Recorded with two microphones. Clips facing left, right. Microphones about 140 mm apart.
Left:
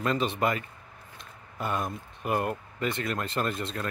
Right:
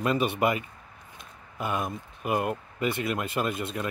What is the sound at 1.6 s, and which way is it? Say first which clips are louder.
Speech: right 1 dB; 5° right (ahead or behind).